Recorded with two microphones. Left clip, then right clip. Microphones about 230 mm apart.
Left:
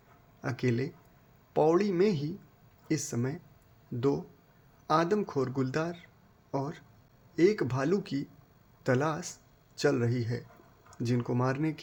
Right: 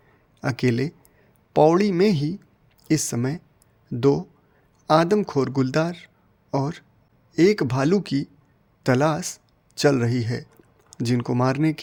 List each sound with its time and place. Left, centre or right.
0.3 s speech: right
4.9 s a man's voice: right